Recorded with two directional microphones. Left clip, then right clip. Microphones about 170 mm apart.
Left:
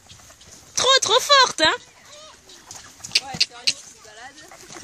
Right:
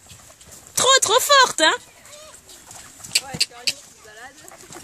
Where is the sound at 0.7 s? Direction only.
5° right (ahead or behind).